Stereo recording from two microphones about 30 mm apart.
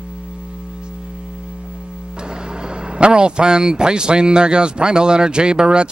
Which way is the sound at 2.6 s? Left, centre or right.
Right.